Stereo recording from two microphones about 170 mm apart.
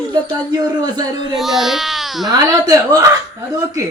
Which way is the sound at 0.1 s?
25° right (ahead or behind).